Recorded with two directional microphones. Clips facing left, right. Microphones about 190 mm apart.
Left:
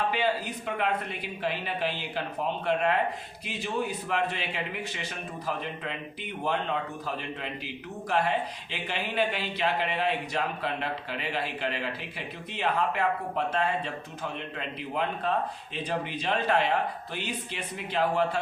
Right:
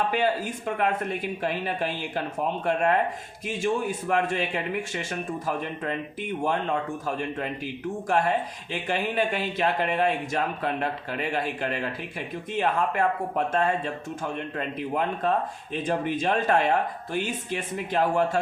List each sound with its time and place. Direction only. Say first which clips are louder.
0.1 s a man's voice: right 3 dB; 45° right (ahead or behind)